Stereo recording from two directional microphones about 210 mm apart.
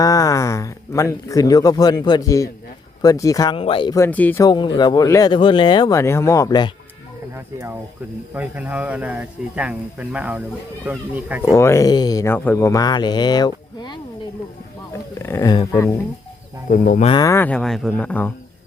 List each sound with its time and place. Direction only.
0.0 s speech: 15° left (ahead or behind)
7.3 s speech: 10° right (ahead or behind)
11.5 s speech: 15° left (ahead or behind)
15.2 s speech: 15° left (ahead or behind)
16.6 s speech: 40° left (ahead or behind)
17.1 s speech: 15° left (ahead or behind)